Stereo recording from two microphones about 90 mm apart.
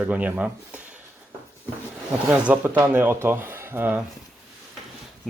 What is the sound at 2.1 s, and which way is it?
Speech, 15° right (ahead or behind).